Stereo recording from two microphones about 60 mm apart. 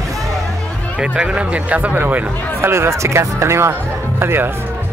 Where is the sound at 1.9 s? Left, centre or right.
Right.